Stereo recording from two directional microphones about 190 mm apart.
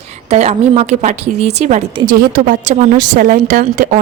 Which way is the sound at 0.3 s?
35° right (ahead or behind).